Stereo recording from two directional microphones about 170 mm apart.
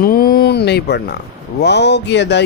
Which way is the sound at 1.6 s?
85° left.